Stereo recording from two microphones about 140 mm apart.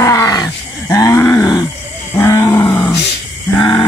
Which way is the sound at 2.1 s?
20° left (ahead or behind).